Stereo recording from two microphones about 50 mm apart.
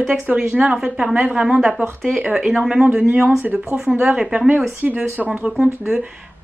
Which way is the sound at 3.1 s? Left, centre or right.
Right.